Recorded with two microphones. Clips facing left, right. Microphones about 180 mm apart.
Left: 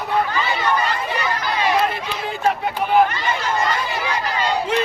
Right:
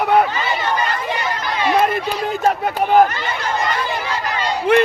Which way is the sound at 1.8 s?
40° right (ahead or behind).